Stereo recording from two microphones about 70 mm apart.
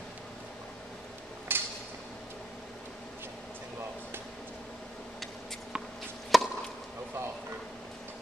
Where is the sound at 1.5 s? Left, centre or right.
Right.